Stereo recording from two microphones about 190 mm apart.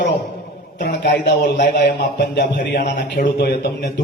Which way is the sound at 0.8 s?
45° left (ahead or behind).